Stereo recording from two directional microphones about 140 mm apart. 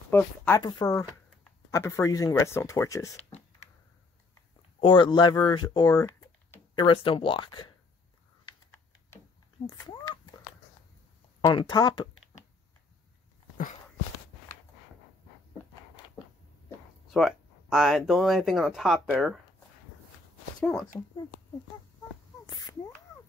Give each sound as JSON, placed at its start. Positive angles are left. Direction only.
{"t": 0.1, "sound": "speech", "side_deg": 15}
{"t": 0.6, "sound": "speech", "side_deg": 30}
{"t": 4.7, "sound": "speech", "side_deg": 35}
{"t": 6.7, "sound": "speech", "side_deg": 35}
{"t": 9.7, "sound": "speech", "side_deg": 25}
{"t": 11.4, "sound": "speech", "side_deg": 30}
{"t": 17.1, "sound": "speech", "side_deg": 0}